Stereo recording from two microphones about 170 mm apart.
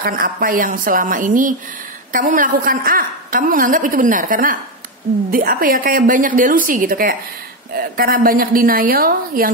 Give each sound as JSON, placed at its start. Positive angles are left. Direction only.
{"t": 0.0, "sound": "a woman's voice", "side_deg": -55}